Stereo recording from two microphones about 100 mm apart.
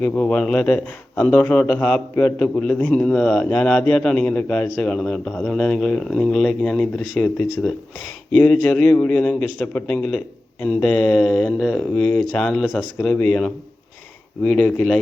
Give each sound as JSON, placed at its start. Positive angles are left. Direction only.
{"t": 0.0, "sound": "a man's voice", "side_deg": 20}
{"t": 11.6, "sound": "speech", "side_deg": -10}
{"t": 11.9, "sound": "speech", "side_deg": 20}
{"t": 12.4, "sound": "a man's voice", "side_deg": 5}
{"t": 14.4, "sound": "a man's voice", "side_deg": 15}